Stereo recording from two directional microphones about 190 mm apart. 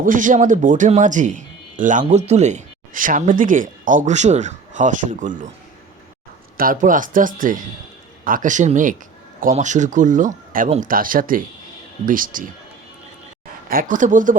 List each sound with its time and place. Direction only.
0.0 s speech: 45° right (ahead or behind)
6.6 s speech: 45° right (ahead or behind)
13.7 s speech: 45° right (ahead or behind)